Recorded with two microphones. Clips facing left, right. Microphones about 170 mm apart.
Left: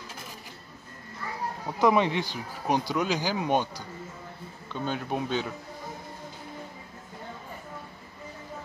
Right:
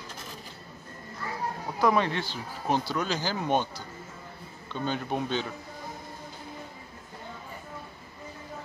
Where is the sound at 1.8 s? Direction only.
15° left (ahead or behind).